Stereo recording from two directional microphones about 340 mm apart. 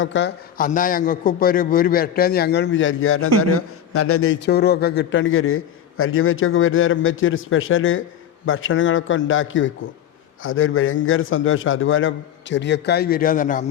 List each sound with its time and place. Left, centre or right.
0.0 s a man's voice: left